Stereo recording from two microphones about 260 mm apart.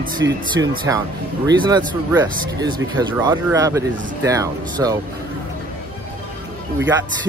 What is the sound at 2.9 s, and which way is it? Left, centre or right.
Speech, centre.